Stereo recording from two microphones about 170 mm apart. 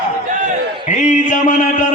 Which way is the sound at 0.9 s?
45° left (ahead or behind).